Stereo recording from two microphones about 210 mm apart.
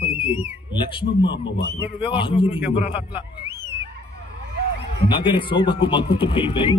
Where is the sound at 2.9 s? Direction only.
10° right (ahead or behind).